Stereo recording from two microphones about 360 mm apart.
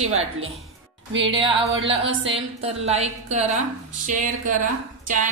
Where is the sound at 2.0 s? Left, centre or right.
Right.